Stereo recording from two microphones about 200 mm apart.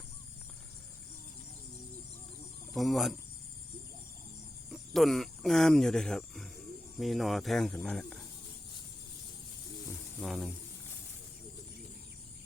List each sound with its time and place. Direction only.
2.7 s speech: centre (ahead or behind)
4.7 s speech: centre (ahead or behind)
10.2 s speech: centre (ahead or behind)